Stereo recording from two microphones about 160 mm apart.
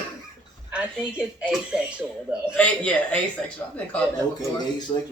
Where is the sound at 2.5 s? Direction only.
10° left (ahead or behind).